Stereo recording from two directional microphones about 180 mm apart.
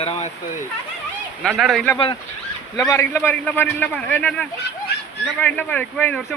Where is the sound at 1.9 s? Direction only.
25° left (ahead or behind).